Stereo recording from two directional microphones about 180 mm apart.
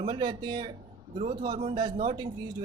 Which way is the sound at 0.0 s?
25° right (ahead or behind).